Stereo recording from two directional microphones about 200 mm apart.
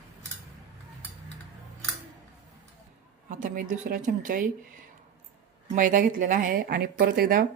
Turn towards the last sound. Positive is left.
turn(degrees=-45)  # may be behind; listen again after turning